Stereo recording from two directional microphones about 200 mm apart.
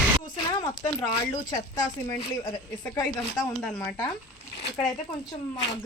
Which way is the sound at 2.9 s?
20° left (ahead or behind).